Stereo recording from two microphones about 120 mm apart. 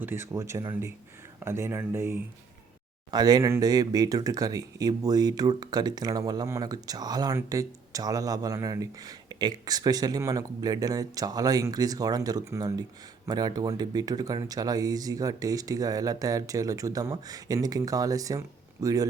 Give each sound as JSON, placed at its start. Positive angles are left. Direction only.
{"t": 0.0, "sound": "speech", "side_deg": -20}
{"t": 3.1, "sound": "speech", "side_deg": -35}